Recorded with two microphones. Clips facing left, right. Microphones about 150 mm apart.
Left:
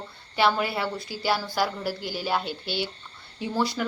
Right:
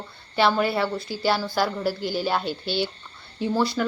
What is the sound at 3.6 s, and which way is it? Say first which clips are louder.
Speech: right 1 dB; 15° left (ahead or behind).